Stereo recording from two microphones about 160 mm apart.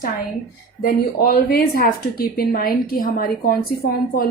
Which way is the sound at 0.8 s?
70° left (ahead or behind).